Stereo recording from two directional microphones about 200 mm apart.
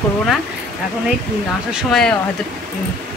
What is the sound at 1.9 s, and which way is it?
Speech, 5° left (ahead or behind).